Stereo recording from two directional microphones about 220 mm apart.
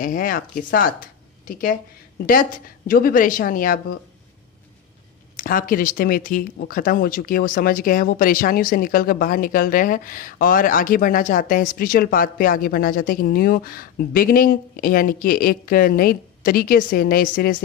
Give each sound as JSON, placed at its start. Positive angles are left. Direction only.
{"t": 0.0, "sound": "speech", "side_deg": 40}
{"t": 2.9, "sound": "speech", "side_deg": 40}
{"t": 5.3, "sound": "speech", "side_deg": 40}